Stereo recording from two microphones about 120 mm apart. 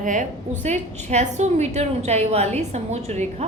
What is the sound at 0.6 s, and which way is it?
A woman's voice, 70° right (ahead or behind).